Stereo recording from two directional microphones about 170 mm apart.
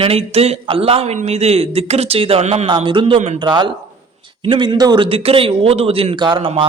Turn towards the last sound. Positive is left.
turn(degrees=-30)  # may be behind; listen again after turning